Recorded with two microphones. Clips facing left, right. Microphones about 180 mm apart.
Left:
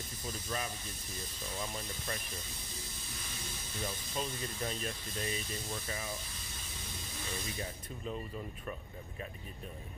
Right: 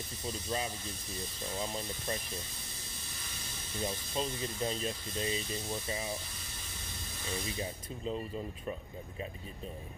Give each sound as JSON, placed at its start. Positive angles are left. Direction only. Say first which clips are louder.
{"t": 0.2, "sound": "speech", "louder": "right 3 dB", "side_deg": -25}
{"t": 3.8, "sound": "speech", "louder": "right 4 dB", "side_deg": -25}
{"t": 7.2, "sound": "speech", "louder": "right 4 dB", "side_deg": -20}